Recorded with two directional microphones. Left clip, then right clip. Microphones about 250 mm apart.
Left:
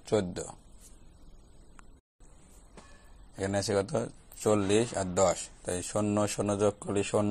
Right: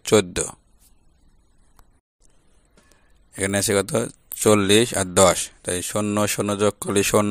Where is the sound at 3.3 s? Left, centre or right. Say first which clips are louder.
Right 8 dB; right.